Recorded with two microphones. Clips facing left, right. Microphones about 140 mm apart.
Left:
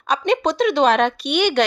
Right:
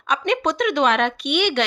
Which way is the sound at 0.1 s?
35° left (ahead or behind).